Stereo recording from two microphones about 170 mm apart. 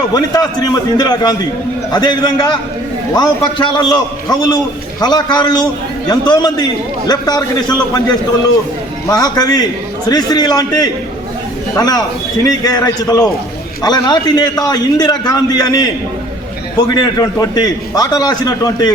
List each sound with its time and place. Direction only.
0.1 s a man's voice: 25° left (ahead or behind)
9.0 s a man's voice: 20° left (ahead or behind)
16.9 s a man's voice: 20° left (ahead or behind)